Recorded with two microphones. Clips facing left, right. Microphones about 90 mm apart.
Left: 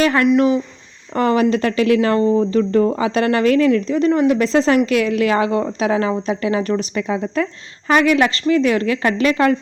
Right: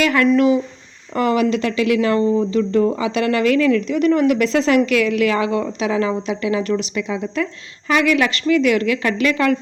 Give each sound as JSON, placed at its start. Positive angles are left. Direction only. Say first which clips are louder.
{"t": 0.0, "sound": "speech", "louder": "left 1 dB", "side_deg": 30}